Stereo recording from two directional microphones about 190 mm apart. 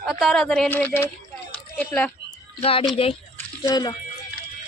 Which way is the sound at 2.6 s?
30° left (ahead or behind).